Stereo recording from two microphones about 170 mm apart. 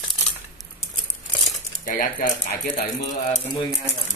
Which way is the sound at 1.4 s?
50° left (ahead or behind).